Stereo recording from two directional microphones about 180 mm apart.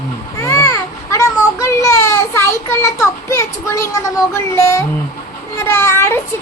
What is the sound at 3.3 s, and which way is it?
Speech, 15° left (ahead or behind).